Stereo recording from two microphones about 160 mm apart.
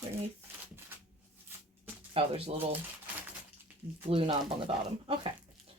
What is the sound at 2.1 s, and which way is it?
Speech, 35° right (ahead or behind).